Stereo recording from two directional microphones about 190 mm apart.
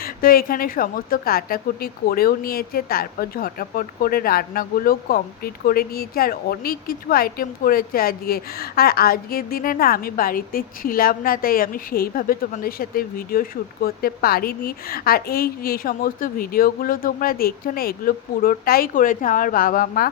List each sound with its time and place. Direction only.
0.0 s a woman's voice: 50° left (ahead or behind)